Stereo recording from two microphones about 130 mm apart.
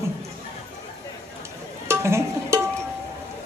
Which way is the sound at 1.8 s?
20° right (ahead or behind).